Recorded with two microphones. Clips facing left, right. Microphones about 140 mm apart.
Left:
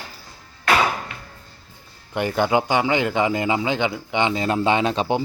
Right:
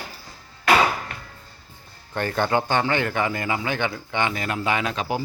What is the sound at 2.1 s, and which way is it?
A man's voice, 15° left (ahead or behind).